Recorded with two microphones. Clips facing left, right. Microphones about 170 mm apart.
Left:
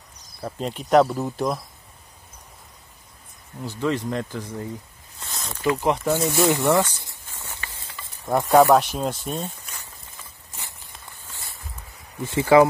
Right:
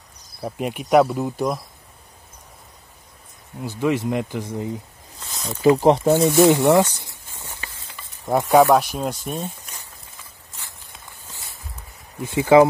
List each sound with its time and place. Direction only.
0.4 s speech: 10° right (ahead or behind)
3.6 s speech: 15° right (ahead or behind)
5.2 s snake: centre (ahead or behind)
5.6 s speech: 30° right (ahead or behind)
6.3 s snake: 20° right (ahead or behind)
8.3 s speech: 5° right (ahead or behind)
12.3 s speech: 15° right (ahead or behind)